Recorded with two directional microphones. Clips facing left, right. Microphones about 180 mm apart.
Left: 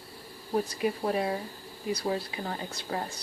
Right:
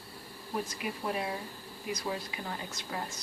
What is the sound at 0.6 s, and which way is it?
Speech, 35° left (ahead or behind).